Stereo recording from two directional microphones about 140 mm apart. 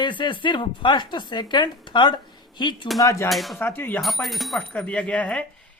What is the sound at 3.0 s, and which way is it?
Speech, 25° left (ahead or behind).